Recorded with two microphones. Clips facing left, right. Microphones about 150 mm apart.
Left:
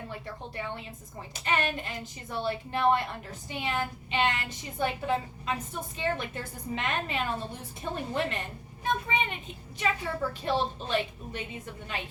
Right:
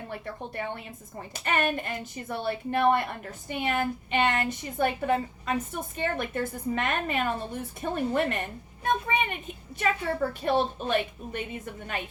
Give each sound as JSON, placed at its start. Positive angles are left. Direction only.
{"t": 0.1, "sound": "a woman's voice", "side_deg": -55}